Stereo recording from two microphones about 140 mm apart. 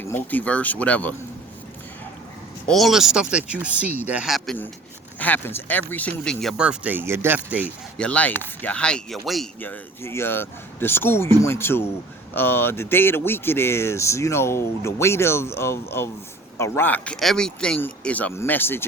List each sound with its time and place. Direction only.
0.0 s speech: 15° left (ahead or behind)
2.6 s speech: centre (ahead or behind)
5.2 s speech: 15° left (ahead or behind); by 7.7 s 10° right (ahead or behind)
7.9 s speech: 10° left (ahead or behind)
9.6 s speech: 15° left (ahead or behind)